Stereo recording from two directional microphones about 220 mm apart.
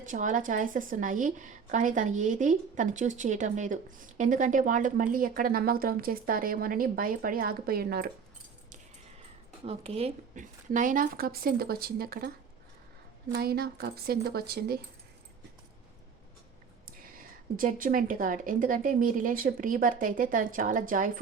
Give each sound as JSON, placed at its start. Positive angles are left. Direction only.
{"t": 0.1, "sound": "a woman's voice", "side_deg": -35}
{"t": 9.6, "sound": "a woman's voice", "side_deg": -25}
{"t": 13.3, "sound": "a woman's voice", "side_deg": -45}
{"t": 17.0, "sound": "a woman's voice", "side_deg": -40}